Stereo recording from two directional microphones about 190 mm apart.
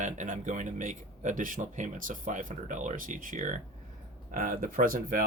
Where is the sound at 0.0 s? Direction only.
40° right (ahead or behind).